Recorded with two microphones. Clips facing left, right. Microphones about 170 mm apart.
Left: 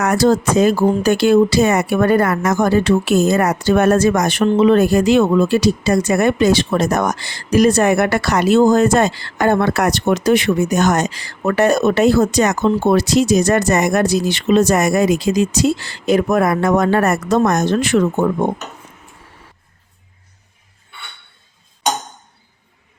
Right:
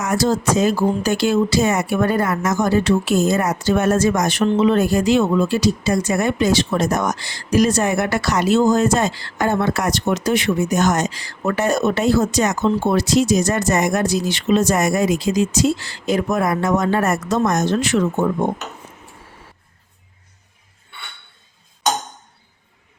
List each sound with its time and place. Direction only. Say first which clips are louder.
0.0 s speech: left 4 dB; 65° left (ahead or behind)